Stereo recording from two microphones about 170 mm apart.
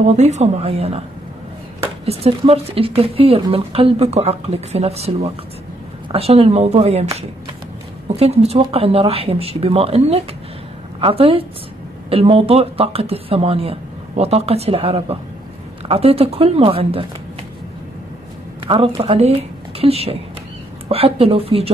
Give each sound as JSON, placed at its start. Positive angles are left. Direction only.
{"t": 0.0, "sound": "speech", "side_deg": -40}
{"t": 2.0, "sound": "speech", "side_deg": -35}
{"t": 8.2, "sound": "speech", "side_deg": -35}
{"t": 18.7, "sound": "speech", "side_deg": -35}